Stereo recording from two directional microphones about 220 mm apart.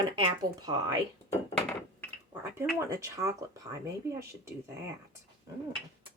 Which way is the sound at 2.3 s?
10° right (ahead or behind).